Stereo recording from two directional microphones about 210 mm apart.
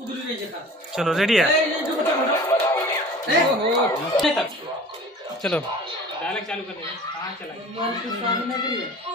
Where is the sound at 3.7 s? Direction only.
Centre (ahead or behind).